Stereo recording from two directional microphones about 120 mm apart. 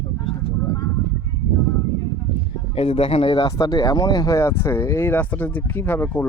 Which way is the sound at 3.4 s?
30° left (ahead or behind).